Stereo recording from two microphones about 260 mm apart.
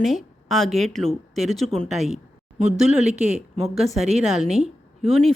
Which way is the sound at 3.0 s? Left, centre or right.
Right.